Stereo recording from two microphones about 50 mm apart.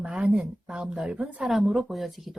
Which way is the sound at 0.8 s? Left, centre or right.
Centre.